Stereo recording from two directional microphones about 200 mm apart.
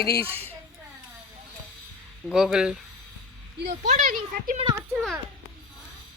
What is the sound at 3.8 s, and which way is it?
Speech, 40° right (ahead or behind).